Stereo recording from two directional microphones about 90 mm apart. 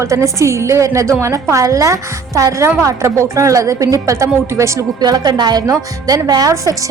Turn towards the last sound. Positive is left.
turn(degrees=-40)  # may be behind; listen again after turning